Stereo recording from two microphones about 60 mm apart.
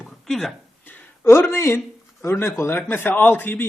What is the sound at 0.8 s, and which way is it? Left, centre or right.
A man's voice, left.